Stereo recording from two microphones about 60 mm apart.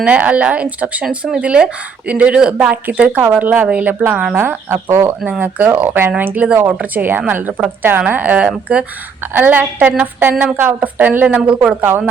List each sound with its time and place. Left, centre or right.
0.0 s speech: right
4.4 s speech: right
5.4 s a woman's voice: right
11.4 s speech: centre
11.8 s a woman's voice: right